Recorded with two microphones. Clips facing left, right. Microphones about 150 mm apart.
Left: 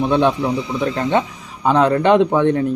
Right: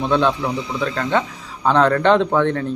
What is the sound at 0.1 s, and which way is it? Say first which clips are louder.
A man's voice: left 2 dB; 15° left (ahead or behind).